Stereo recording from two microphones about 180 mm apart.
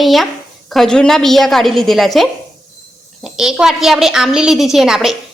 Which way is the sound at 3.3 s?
5° right (ahead or behind).